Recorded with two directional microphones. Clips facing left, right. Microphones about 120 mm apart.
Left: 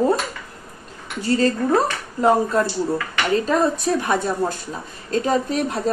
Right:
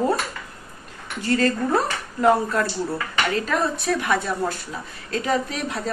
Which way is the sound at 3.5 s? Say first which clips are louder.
Left 4 dB; 30° left (ahead or behind).